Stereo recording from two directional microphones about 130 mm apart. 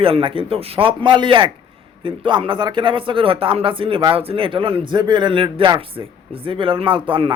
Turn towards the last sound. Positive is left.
turn(degrees=-45)  # may be behind; listen again after turning